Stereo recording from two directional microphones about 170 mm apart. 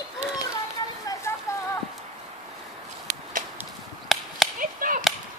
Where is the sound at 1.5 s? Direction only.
15° left (ahead or behind).